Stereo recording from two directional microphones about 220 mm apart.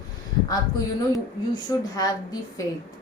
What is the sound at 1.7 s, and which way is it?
Speech, 15° left (ahead or behind).